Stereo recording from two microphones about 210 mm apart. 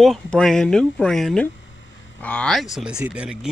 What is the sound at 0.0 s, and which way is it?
A man's voice, centre (ahead or behind).